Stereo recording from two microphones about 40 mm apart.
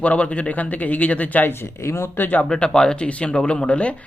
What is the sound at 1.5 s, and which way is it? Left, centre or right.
Speech, left.